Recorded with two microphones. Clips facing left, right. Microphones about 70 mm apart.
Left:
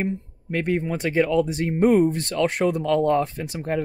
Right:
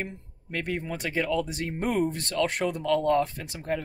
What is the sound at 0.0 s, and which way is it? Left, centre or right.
Speech, left.